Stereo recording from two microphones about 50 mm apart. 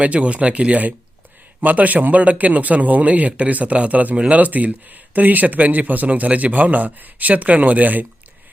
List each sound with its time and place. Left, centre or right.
0.0 s a man's voice: right